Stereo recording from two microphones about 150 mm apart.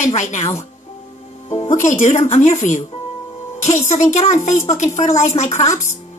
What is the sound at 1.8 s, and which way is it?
A woman's voice, 55° left (ahead or behind).